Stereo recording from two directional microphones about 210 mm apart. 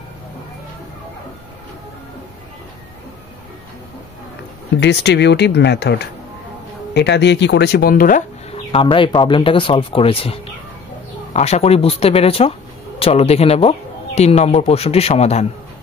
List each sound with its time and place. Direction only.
4.7 s speech: 55° left (ahead or behind)
8.9 s speech: 25° left (ahead or behind)